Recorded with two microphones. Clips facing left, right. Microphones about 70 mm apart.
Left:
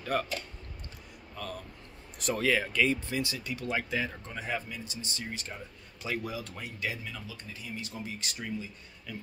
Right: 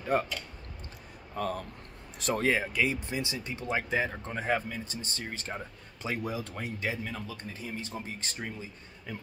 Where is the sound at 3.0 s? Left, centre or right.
Right.